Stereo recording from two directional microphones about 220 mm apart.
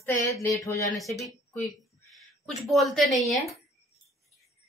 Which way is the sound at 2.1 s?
Centre (ahead or behind).